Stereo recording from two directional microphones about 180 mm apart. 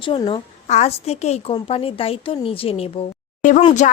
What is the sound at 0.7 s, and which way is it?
A woman's voice, 40° left (ahead or behind).